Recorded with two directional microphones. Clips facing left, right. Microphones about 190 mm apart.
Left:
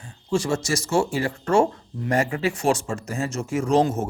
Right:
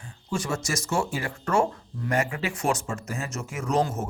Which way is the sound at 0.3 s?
30° left (ahead or behind).